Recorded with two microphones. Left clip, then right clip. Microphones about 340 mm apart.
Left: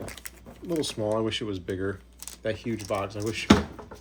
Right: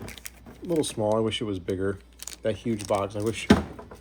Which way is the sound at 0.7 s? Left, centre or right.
Centre.